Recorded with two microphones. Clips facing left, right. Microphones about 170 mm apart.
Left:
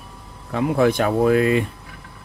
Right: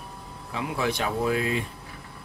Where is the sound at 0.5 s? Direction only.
55° left (ahead or behind).